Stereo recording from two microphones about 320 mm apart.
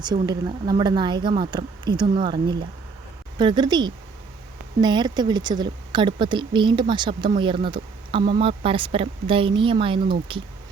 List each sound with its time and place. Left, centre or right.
0.0 s speech: centre